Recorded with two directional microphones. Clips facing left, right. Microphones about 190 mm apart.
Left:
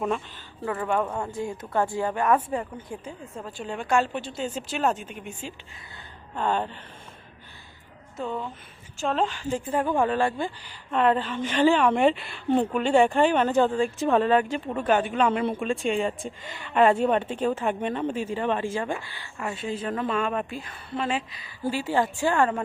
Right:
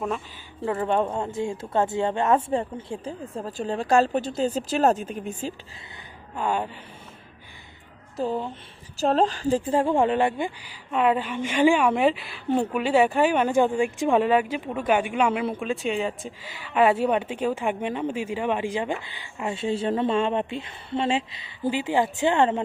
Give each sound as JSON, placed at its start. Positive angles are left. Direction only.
{"t": 0.6, "sound": "speech", "side_deg": -25}
{"t": 6.3, "sound": "a woman's voice", "side_deg": -10}
{"t": 8.1, "sound": "a woman's voice", "side_deg": -35}